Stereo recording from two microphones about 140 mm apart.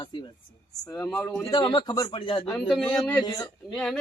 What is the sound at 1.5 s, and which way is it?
Speech, 30° left (ahead or behind).